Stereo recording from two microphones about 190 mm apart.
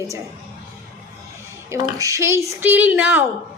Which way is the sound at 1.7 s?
15° right (ahead or behind).